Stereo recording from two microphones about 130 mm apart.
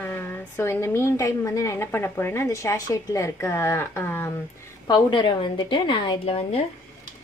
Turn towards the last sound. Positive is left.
turn(degrees=50)  # may be behind; listen again after turning